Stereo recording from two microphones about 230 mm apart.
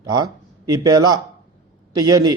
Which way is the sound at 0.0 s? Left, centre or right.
Centre.